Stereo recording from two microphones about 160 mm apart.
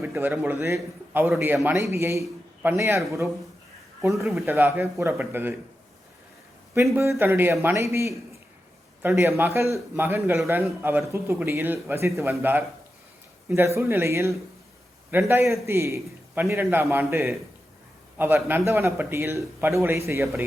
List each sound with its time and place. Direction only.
0.0 s a man's voice: 10° right (ahead or behind)
4.1 s speech: centre (ahead or behind)
4.4 s a man's voice: 15° right (ahead or behind)
6.9 s a man's voice: 15° right (ahead or behind)
13.7 s a man's voice: 15° right (ahead or behind)